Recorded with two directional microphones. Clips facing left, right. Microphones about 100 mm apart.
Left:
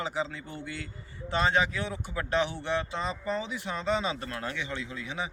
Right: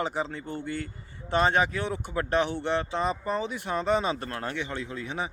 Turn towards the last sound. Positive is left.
turn(degrees=-45)  # may be behind; listen again after turning